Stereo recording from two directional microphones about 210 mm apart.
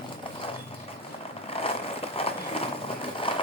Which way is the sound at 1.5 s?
25° left (ahead or behind).